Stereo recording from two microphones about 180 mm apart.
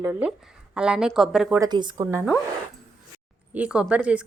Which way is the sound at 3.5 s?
5° right (ahead or behind).